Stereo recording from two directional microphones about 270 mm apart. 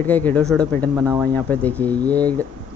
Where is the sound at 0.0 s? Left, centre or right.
Centre.